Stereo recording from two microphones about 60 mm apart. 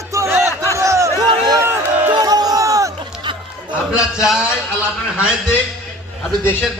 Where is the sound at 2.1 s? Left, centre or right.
Right.